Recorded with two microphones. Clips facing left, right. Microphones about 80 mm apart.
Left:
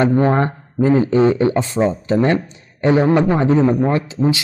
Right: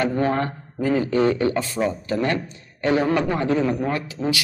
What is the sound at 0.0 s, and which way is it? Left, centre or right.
A man's voice, left.